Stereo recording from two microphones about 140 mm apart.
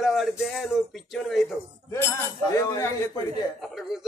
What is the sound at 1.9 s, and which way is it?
Speech, 20° left (ahead or behind).